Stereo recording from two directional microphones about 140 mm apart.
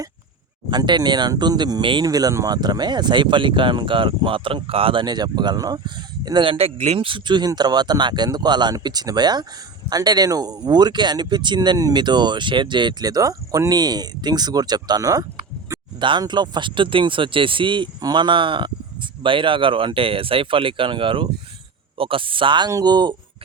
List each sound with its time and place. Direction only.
0.7 s speech: 30° right (ahead or behind)